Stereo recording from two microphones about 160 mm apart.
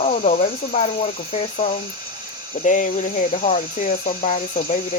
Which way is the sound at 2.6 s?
50° left (ahead or behind).